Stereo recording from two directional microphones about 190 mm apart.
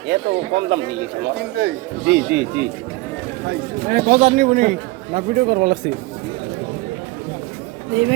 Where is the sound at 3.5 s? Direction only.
50° right (ahead or behind).